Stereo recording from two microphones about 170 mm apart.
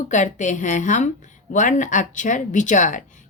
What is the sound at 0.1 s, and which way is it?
A woman's voice, 45° left (ahead or behind).